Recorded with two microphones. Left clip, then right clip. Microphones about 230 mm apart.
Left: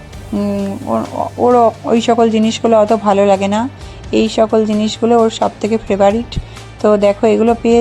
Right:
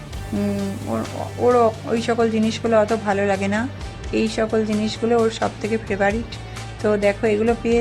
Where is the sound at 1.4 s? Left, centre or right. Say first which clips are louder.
Left 6 dB; centre.